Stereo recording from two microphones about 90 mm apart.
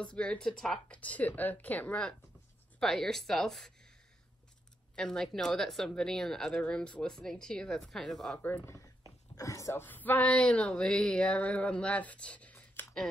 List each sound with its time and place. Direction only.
0.0 s a woman's voice: 10° left (ahead or behind)
4.9 s a woman's voice: 10° left (ahead or behind)
8.4 s speech: 20° left (ahead or behind)
8.6 s a sound: 35° left (ahead or behind)
9.3 s speech: 35° left (ahead or behind)
9.8 s speech: 20° left (ahead or behind)